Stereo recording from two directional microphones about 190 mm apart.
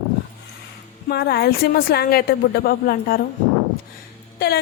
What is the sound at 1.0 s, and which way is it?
Speech, 55° left (ahead or behind).